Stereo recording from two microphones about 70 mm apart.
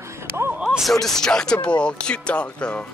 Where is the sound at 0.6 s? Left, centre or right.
Centre.